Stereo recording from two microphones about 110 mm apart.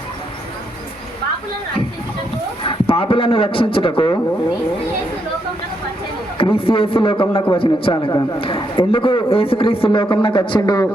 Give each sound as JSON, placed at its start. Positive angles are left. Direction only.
{"t": 2.6, "sound": "a man's voice", "side_deg": 55}
{"t": 6.3, "sound": "a man's voice", "side_deg": 55}